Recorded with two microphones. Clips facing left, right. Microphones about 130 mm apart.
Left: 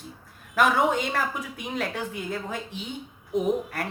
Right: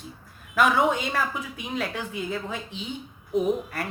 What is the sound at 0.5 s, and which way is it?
Speech, 50° left (ahead or behind).